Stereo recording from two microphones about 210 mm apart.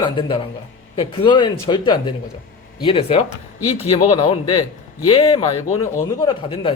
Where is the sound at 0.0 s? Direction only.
25° left (ahead or behind).